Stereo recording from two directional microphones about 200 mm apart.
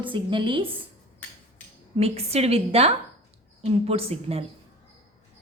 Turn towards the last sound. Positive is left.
turn(degrees=-30)  # may be behind; listen again after turning